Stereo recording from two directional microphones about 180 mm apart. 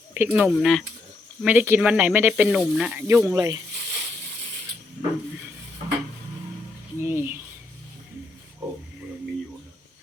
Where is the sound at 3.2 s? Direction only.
20° right (ahead or behind).